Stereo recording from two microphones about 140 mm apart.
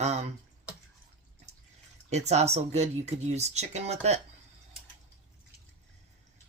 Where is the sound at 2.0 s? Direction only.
50° right (ahead or behind).